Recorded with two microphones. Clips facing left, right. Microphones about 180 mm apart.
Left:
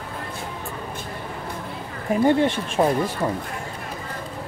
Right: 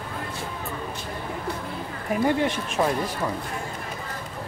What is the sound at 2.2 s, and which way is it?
Speech, 30° left (ahead or behind).